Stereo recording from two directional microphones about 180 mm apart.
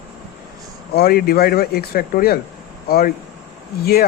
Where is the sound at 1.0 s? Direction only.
55° left (ahead or behind).